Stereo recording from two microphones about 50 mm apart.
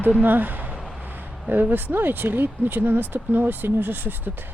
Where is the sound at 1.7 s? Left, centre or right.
Right.